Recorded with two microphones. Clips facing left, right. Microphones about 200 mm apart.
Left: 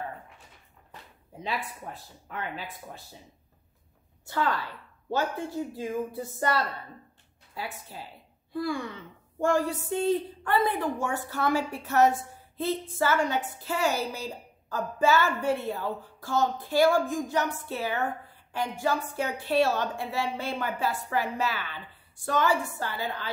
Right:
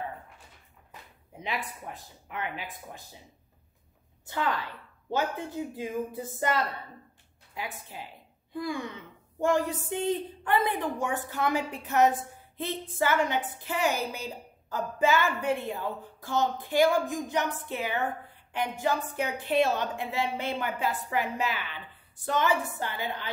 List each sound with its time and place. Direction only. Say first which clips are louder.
2.2 s a child's voice: even; 15° right (ahead or behind)
4.3 s a child's voice: left 2 dB; 20° right (ahead or behind)
7.5 s a child's voice: left 1 dB; 15° right (ahead or behind)